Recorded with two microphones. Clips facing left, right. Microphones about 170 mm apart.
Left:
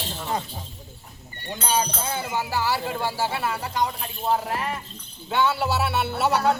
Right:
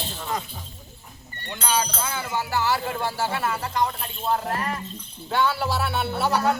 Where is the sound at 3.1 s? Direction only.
10° left (ahead or behind).